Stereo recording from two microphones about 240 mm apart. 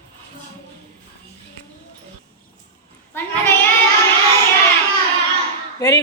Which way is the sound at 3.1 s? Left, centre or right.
Centre.